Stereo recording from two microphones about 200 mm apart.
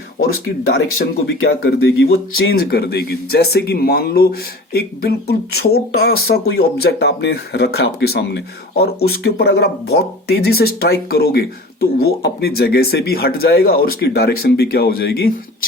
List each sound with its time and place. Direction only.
0.7 s speech: 55° left (ahead or behind)